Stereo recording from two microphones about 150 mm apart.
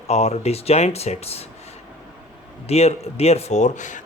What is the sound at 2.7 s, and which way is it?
Speech, 45° left (ahead or behind).